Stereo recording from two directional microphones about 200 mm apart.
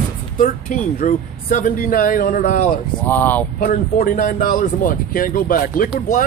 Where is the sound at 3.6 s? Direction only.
45° left (ahead or behind).